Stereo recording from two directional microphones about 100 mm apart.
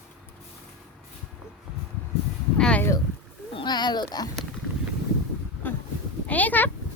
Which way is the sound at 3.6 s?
45° left (ahead or behind).